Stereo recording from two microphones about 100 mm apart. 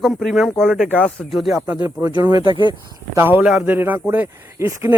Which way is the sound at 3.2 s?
20° right (ahead or behind).